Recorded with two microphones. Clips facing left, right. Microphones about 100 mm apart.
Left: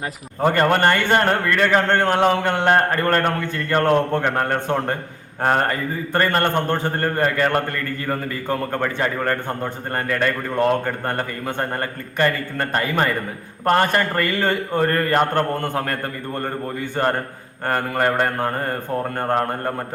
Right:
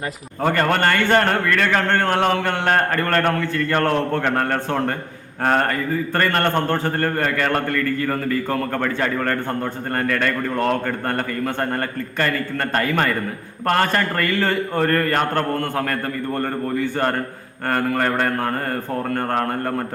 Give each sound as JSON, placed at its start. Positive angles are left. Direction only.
{"t": 0.4, "sound": "a man's voice", "side_deg": 20}
{"t": 17.7, "sound": "a man's voice", "side_deg": 20}